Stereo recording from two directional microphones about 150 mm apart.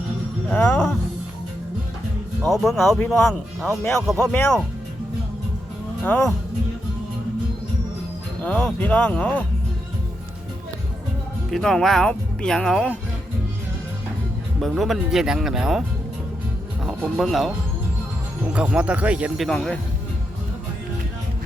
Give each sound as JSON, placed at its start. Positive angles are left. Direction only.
{"t": 0.4, "sound": "music", "side_deg": 5}
{"t": 2.5, "sound": "speech", "side_deg": 0}
{"t": 6.1, "sound": "speech", "side_deg": 20}
{"t": 8.4, "sound": "speech", "side_deg": 10}
{"t": 11.5, "sound": "speech", "side_deg": 5}
{"t": 14.6, "sound": "speech", "side_deg": 0}
{"t": 16.8, "sound": "speech", "side_deg": 0}
{"t": 18.5, "sound": "speech", "side_deg": -5}
{"t": 19.5, "sound": "speech", "side_deg": 5}